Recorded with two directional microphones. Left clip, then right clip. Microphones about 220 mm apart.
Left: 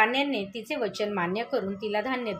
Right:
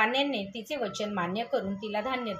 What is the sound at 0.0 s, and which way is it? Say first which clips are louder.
A woman's voice: left 2 dB; 35° left (ahead or behind).